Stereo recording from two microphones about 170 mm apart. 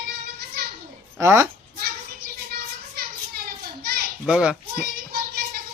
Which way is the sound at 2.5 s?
65° right (ahead or behind).